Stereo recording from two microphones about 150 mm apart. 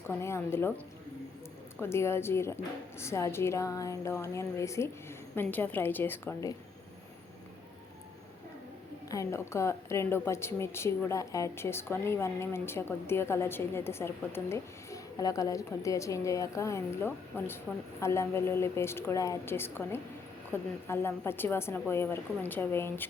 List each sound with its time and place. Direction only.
0.1 s a woman's voice: 20° left (ahead or behind)
1.8 s a woman's voice: 15° left (ahead or behind)
9.0 s a woman's voice: 20° left (ahead or behind)